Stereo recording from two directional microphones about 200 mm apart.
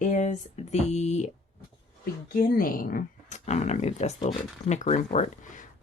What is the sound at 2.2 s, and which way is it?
Speech, 45° left (ahead or behind).